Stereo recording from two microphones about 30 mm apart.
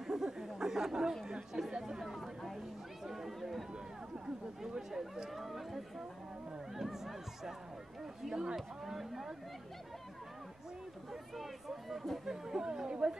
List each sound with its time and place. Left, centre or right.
0.0 s a sound: centre
1.2 s speech: right
2.1 s speech: centre
4.7 s speech: centre
5.3 s speech: centre
6.8 s a sound: centre
8.2 s speech: centre
8.5 s speech: centre
11.3 s speech: centre; by 13.1 s right